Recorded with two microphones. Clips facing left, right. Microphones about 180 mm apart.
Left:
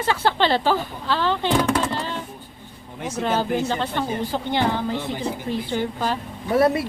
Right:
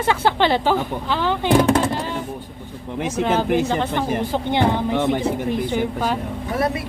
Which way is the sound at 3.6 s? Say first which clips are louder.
Right 3 dB; 15° right (ahead or behind).